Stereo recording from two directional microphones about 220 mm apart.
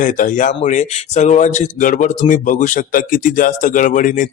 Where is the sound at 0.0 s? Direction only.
35° left (ahead or behind).